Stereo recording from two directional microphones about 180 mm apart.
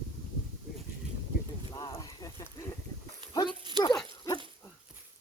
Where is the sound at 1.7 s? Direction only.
20° left (ahead or behind).